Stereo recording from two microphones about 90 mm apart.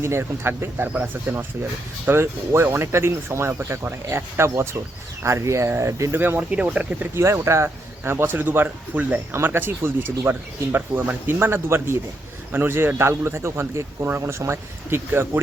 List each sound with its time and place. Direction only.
0.0 s speech: 30° right (ahead or behind)
7.2 s speech: 30° right (ahead or behind)